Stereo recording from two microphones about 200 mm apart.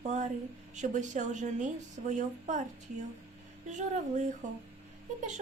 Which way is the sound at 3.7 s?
35° right (ahead or behind).